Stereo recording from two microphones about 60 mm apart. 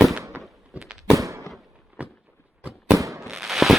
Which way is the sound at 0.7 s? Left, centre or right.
Centre.